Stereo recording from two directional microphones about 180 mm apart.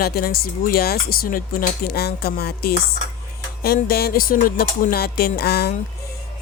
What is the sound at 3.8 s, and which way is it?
Speech, 60° left (ahead or behind).